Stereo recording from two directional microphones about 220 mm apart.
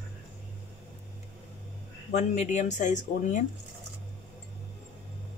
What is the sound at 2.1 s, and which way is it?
Speech, 30° left (ahead or behind).